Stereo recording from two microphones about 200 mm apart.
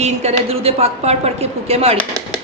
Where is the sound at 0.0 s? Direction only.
30° right (ahead or behind).